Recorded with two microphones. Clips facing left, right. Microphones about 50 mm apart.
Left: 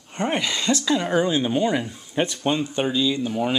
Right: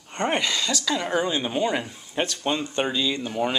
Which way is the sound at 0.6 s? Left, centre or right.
Left.